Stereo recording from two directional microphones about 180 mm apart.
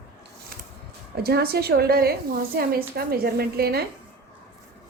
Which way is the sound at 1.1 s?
60° right (ahead or behind).